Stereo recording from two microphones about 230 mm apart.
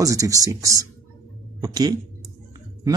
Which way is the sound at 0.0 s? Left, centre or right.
Centre.